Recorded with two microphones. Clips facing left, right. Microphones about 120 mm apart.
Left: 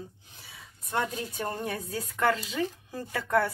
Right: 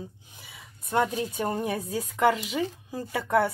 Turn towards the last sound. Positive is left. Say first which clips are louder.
# right 2 dB
turn(degrees=-15)  # may be behind; listen again after turning